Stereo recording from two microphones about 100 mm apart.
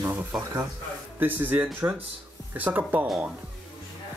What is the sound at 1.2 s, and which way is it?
Speech, 20° right (ahead or behind).